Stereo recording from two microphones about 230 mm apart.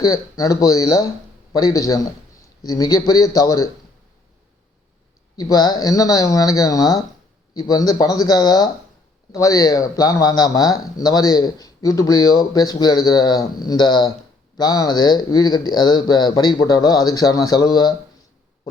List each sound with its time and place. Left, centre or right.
0.0 s speech: centre
5.4 s speech: centre